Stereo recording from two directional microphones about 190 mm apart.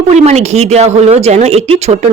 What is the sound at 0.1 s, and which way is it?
A woman's voice, 35° right (ahead or behind).